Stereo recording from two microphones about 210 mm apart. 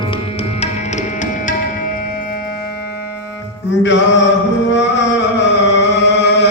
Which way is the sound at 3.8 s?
60° left (ahead or behind).